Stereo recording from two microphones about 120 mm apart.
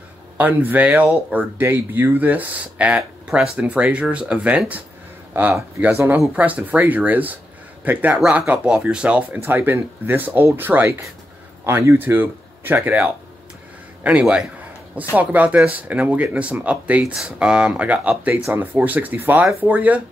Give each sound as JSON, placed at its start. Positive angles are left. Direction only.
{"t": 0.4, "sound": "speech", "side_deg": -15}